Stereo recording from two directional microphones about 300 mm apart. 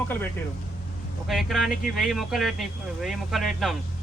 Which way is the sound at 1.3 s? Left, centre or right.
Centre.